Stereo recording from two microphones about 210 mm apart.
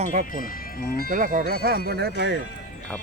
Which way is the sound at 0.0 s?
35° right (ahead or behind).